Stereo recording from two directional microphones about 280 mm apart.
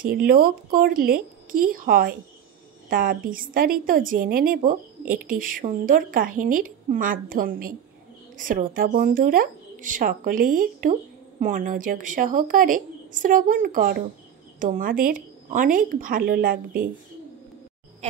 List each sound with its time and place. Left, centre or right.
0.3 s a woman's voice: right